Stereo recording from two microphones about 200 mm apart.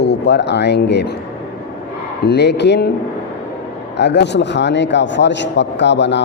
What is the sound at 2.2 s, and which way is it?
Speech, 55° left (ahead or behind).